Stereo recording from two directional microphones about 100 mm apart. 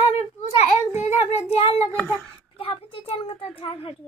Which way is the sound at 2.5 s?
65° left (ahead or behind).